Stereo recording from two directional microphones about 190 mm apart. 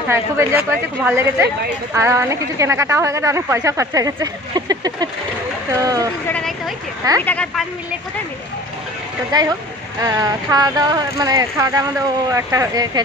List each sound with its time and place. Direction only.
0.1 s a woman's voice: 10° right (ahead or behind)
6.2 s a sound: 5° left (ahead or behind)
7.2 s a woman's voice: 5° left (ahead or behind)
9.3 s speech: 20° right (ahead or behind)